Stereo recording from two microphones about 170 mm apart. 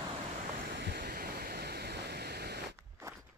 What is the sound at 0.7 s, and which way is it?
Waves, 70° right (ahead or behind).